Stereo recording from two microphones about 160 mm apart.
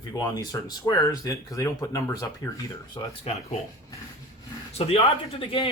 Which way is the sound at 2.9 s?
40° left (ahead or behind).